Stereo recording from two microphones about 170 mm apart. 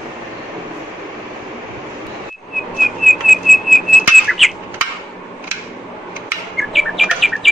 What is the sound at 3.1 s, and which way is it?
Whistling, centre (ahead or behind).